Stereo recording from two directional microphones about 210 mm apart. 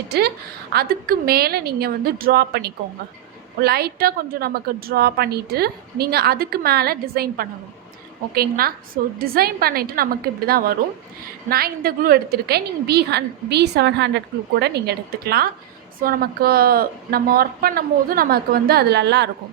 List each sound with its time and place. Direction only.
0.7 s a woman's voice: 45° right (ahead or behind)